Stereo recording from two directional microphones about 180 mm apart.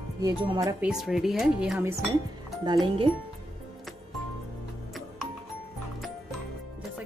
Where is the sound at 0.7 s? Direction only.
5° right (ahead or behind).